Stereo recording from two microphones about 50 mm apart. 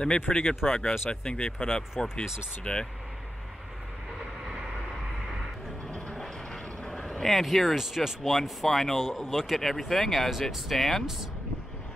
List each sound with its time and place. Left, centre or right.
0.3 s speech: centre
5.9 s train: left
6.1 s vehicle: centre
7.8 s speech: centre